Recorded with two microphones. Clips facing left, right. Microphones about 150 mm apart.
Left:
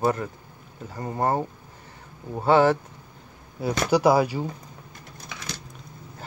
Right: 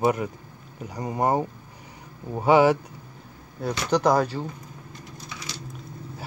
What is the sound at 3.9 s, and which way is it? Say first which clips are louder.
Speech: left 1 dB; 5° left (ahead or behind).